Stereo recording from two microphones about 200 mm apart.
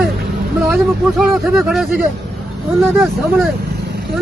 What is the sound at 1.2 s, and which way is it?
Speech, centre (ahead or behind).